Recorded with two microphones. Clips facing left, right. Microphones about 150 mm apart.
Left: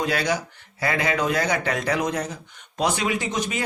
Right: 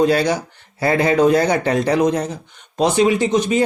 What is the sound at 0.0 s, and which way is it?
Speech, 35° right (ahead or behind).